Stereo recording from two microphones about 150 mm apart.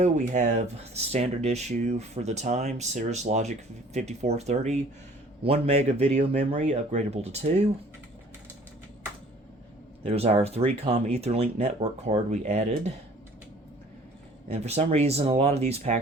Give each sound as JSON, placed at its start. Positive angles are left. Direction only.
{"t": 0.0, "sound": "speech", "side_deg": -50}
{"t": 10.0, "sound": "speech", "side_deg": -45}
{"t": 14.5, "sound": "speech", "side_deg": -45}